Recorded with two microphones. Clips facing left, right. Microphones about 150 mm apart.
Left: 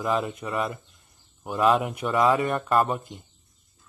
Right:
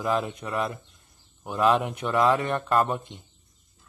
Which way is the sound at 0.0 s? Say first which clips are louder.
Even; centre (ahead or behind).